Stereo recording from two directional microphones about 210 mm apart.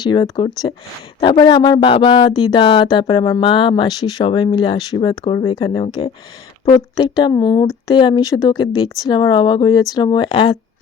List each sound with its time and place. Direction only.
0.0 s speech: 20° left (ahead or behind)